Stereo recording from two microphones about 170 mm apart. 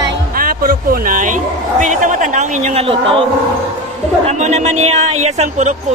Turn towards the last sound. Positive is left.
turn(degrees=-45)  # may be behind; listen again after turning